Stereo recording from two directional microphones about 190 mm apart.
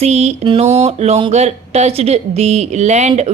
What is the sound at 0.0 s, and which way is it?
A woman's voice, 35° right (ahead or behind).